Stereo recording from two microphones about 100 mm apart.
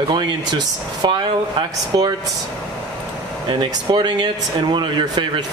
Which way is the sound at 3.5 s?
50° right (ahead or behind).